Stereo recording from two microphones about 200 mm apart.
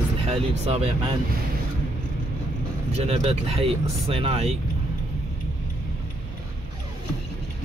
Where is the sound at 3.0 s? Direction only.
30° right (ahead or behind).